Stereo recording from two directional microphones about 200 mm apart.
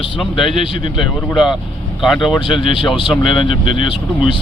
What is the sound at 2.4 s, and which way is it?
Speech, 25° left (ahead or behind).